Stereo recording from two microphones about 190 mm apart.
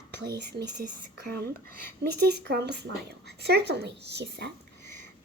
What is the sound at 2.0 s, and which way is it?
A child's voice, 60° right (ahead or behind).